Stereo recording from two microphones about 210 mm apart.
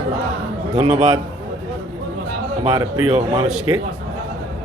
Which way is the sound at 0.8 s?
25° right (ahead or behind).